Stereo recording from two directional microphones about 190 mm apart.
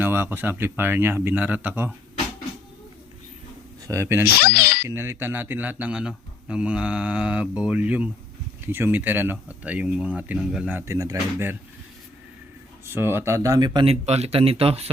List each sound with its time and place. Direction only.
0.0 s speech: 10° right (ahead or behind)
3.8 s speech: 15° right (ahead or behind)
4.4 s speech: 55° left (ahead or behind)
4.9 s speech: 15° right (ahead or behind)
12.8 s speech: 10° right (ahead or behind); by 14.8 s 30° right (ahead or behind)